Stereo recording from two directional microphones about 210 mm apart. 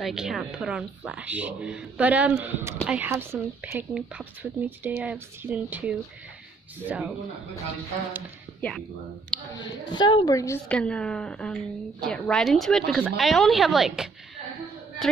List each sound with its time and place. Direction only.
0.0 s a woman's voice: centre (ahead or behind)
8.5 s speech: 5° left (ahead or behind)
9.5 s a woman's voice: 20° left (ahead or behind); by 14.0 s centre (ahead or behind)